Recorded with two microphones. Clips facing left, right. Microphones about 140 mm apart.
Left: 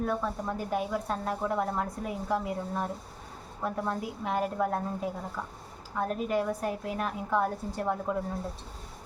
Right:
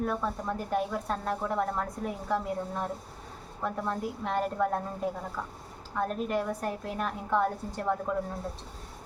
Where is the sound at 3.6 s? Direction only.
5° left (ahead or behind).